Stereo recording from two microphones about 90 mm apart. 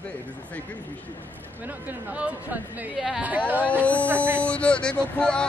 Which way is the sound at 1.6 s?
20° right (ahead or behind).